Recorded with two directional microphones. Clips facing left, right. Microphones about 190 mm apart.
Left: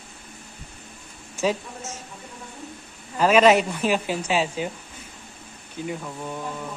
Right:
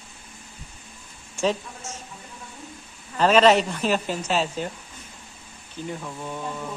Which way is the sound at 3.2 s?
10° left (ahead or behind).